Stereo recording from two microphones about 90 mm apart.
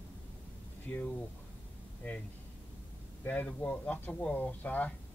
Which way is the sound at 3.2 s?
15° left (ahead or behind).